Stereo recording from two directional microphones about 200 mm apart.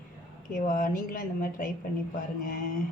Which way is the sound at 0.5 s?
40° left (ahead or behind).